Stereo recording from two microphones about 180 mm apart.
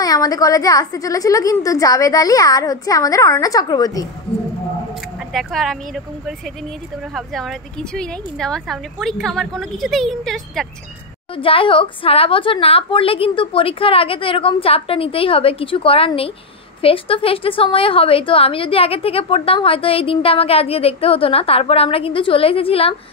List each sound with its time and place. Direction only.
0.0 s a woman's voice: 20° left (ahead or behind)
5.3 s speech: centre (ahead or behind)
7.2 s speech: centre (ahead or behind)
11.3 s a woman's voice: 30° left (ahead or behind)